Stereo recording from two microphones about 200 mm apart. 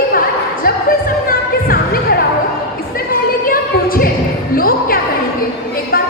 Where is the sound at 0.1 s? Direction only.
45° left (ahead or behind).